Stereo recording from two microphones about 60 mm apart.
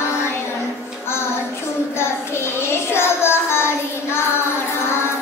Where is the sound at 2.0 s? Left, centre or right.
Left.